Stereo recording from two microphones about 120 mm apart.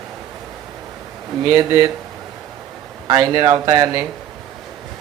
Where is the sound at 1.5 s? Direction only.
30° right (ahead or behind).